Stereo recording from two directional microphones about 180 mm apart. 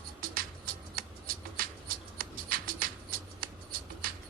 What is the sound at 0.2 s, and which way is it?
Music, 55° right (ahead or behind).